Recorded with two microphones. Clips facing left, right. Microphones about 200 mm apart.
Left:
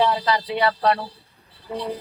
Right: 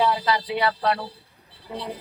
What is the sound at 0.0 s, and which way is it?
Speech, 40° left (ahead or behind).